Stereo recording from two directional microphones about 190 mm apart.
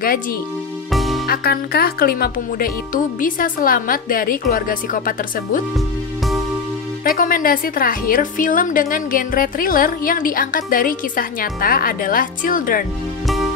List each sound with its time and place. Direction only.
0.9 s music: centre (ahead or behind)
1.2 s a woman's voice: 55° left (ahead or behind)
7.1 s a woman's voice: 45° left (ahead or behind)